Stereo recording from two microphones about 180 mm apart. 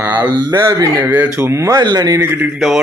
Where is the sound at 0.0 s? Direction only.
10° right (ahead or behind).